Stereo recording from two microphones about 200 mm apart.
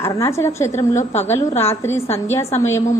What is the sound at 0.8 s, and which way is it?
Speech, 35° left (ahead or behind).